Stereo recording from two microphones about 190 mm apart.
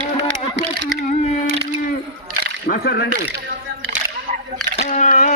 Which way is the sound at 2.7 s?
55° left (ahead or behind).